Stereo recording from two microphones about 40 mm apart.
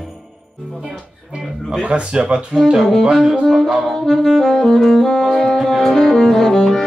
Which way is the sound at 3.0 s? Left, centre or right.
Centre.